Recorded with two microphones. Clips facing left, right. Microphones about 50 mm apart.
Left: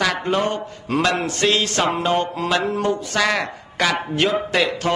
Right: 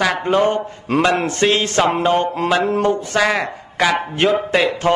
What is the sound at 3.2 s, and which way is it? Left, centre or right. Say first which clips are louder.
A man's voice: right 3 dB; centre.